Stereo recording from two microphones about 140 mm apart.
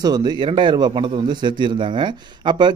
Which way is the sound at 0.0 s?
30° right (ahead or behind).